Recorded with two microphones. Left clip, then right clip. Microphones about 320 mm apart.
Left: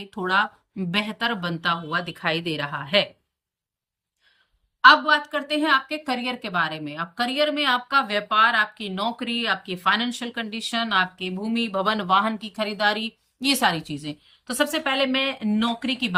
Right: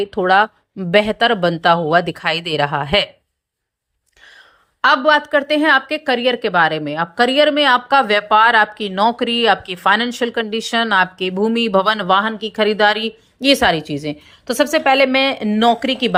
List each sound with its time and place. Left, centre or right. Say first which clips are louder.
0.0 s a woman's voice: right 9 dB; centre
4.8 s a woman's voice: right 2 dB; centre